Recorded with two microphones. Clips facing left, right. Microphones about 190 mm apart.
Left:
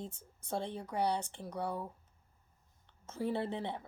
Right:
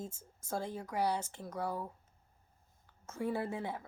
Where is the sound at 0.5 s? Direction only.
30° left (ahead or behind).